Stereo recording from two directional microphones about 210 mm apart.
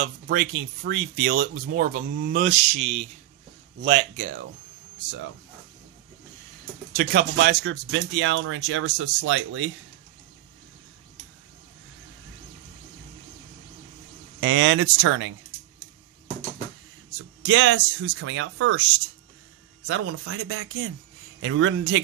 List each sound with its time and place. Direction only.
0.0 s speech: 50° right (ahead or behind); by 4.3 s 35° right (ahead or behind)
7.0 s speech: 50° right (ahead or behind); by 9.7 s 70° right (ahead or behind)
14.4 s speech: 65° right (ahead or behind)
17.5 s speech: 65° right (ahead or behind)
19.9 s speech: 65° right (ahead or behind)